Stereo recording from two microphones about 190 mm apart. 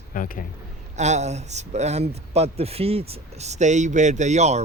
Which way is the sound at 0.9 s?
35° right (ahead or behind).